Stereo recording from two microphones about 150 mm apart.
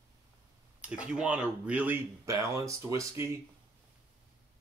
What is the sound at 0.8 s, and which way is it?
Speech, 10° right (ahead or behind).